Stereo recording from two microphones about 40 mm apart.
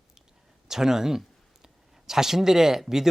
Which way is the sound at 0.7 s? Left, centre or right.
Centre.